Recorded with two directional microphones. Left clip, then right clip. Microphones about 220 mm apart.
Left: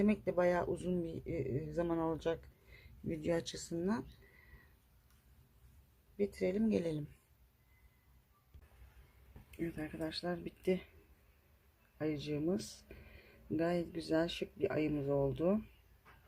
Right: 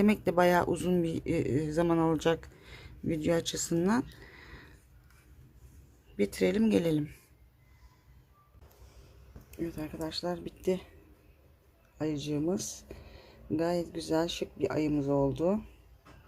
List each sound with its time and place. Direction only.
0.0 s speech: 20° right (ahead or behind)
6.1 s speech: 20° right (ahead or behind)
9.5 s speech: centre (ahead or behind)
11.9 s speech: centre (ahead or behind)